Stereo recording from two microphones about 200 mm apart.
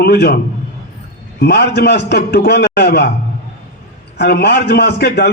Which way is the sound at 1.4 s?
55° left (ahead or behind).